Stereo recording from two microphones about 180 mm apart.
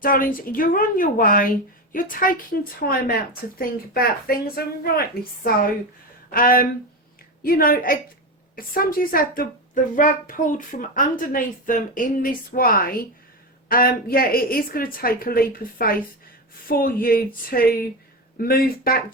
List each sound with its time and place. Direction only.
0.0 s a woman's voice: 50° left (ahead or behind)